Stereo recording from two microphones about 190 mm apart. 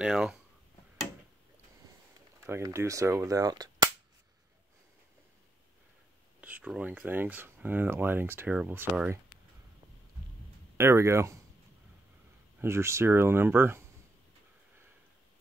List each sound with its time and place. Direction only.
0.0 s speech: 5° right (ahead or behind)
2.4 s speech: 15° right (ahead or behind)
6.4 s speech: 5° right (ahead or behind)
10.8 s speech: 15° right (ahead or behind)
12.5 s speech: 15° right (ahead or behind)